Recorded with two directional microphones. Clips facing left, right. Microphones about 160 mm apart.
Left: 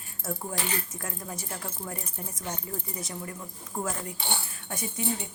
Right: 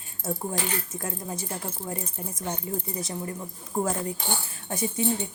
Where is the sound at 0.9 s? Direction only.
25° right (ahead or behind).